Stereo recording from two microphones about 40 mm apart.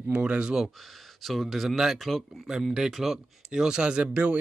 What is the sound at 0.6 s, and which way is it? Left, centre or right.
Speech, centre.